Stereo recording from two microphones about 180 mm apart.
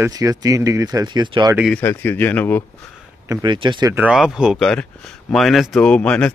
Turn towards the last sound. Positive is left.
turn(degrees=5)  # may be behind; listen again after turning